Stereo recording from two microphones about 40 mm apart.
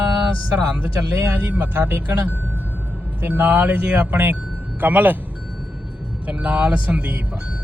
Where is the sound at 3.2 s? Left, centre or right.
Right.